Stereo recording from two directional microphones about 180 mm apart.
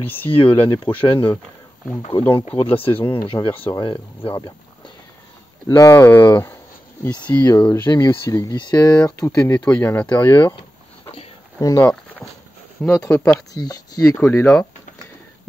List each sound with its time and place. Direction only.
0.3 s speech: 30° left (ahead or behind)
4.4 s a sound: 25° left (ahead or behind)
5.7 s speech: 15° left (ahead or behind)
7.1 s speech: 25° left (ahead or behind)
9.5 s speech: 5° left (ahead or behind)
11.6 s speech: 15° left (ahead or behind)
13.0 s speech: 10° left (ahead or behind)